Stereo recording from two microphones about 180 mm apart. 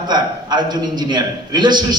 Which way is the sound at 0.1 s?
25° right (ahead or behind).